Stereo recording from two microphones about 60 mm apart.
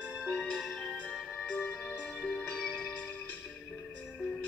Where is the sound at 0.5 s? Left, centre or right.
Centre.